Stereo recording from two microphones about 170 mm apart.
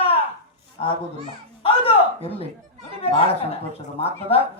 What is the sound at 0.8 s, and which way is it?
Speech, 35° left (ahead or behind).